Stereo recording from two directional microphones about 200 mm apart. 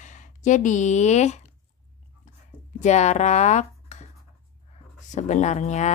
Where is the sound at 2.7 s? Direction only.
35° left (ahead or behind).